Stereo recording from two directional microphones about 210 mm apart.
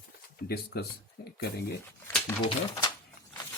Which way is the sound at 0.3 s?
50° left (ahead or behind).